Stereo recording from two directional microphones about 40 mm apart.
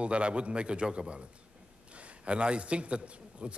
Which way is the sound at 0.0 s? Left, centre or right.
Right.